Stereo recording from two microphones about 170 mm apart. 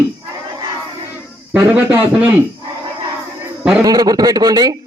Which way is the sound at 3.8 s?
20° right (ahead or behind).